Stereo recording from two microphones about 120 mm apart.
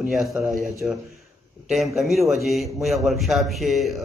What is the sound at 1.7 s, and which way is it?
Speech, centre (ahead or behind).